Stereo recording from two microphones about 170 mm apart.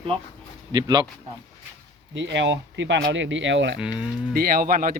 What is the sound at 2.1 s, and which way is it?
Speech, 90° right.